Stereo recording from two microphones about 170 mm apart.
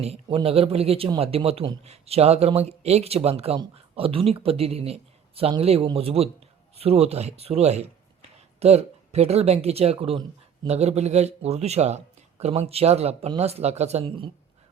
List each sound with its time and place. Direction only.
0.0 s speech: 35° right (ahead or behind)